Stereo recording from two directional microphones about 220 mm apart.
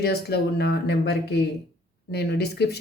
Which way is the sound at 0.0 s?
45° left (ahead or behind).